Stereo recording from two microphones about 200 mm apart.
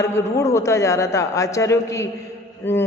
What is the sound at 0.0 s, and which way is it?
A man's voice, 15° left (ahead or behind).